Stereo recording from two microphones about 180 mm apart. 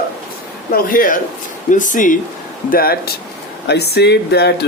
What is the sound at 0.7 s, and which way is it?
Speech, 50° left (ahead or behind).